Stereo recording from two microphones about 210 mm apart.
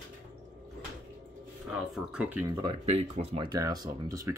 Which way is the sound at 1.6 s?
5° right (ahead or behind).